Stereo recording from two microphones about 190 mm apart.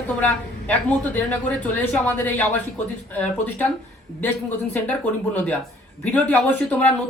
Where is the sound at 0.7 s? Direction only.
10° left (ahead or behind).